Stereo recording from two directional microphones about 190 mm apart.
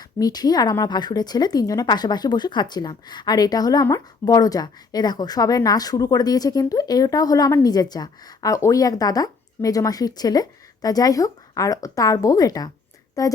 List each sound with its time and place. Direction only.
0.2 s a woman's voice: 20° left (ahead or behind)